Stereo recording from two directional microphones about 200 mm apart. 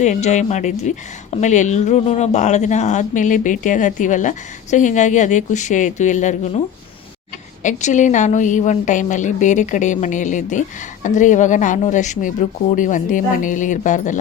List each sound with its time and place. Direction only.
0.0 s speech: 35° left (ahead or behind)
7.6 s speech: 40° left (ahead or behind)